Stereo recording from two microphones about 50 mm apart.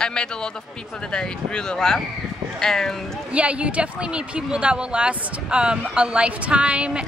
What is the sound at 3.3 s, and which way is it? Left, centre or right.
A woman's voice, right.